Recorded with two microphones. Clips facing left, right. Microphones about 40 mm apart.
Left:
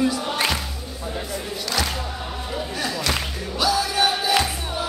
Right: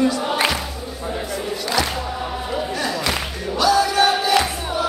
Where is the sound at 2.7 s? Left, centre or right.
Centre.